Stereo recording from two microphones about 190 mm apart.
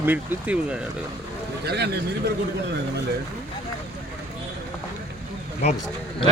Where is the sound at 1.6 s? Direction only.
60° right (ahead or behind).